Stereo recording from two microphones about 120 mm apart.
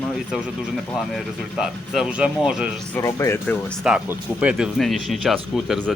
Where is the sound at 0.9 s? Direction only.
Centre (ahead or behind).